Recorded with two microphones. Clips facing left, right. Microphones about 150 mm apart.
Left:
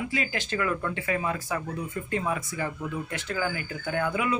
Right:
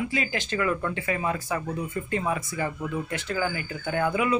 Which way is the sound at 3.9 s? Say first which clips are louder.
Right 2 dB; 15° right (ahead or behind).